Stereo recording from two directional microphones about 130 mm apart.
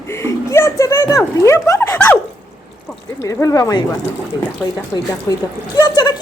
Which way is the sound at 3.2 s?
25° left (ahead or behind).